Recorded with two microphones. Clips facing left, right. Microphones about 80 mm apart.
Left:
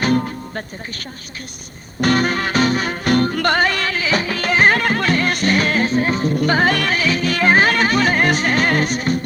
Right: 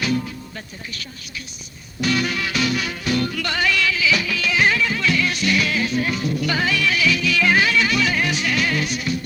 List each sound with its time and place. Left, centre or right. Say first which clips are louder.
0.0 s music: left 5 dB; left